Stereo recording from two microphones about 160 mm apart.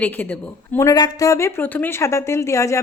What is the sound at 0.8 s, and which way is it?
A woman's voice, 20° left (ahead or behind).